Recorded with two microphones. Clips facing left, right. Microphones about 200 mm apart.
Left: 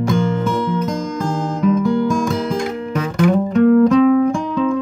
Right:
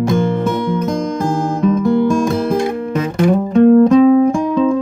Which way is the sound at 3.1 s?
30° right (ahead or behind).